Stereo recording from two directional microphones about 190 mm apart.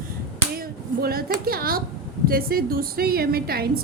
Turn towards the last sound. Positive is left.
turn(degrees=-55)  # may be behind; listen again after turning